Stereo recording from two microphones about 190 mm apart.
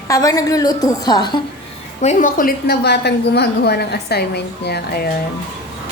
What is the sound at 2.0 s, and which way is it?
A woman's voice, 40° left (ahead or behind).